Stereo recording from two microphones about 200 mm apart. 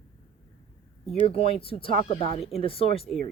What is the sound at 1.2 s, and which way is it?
Speech, 30° left (ahead or behind).